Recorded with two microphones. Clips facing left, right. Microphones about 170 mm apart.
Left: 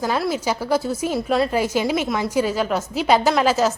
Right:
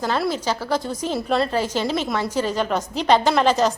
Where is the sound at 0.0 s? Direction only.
5° left (ahead or behind).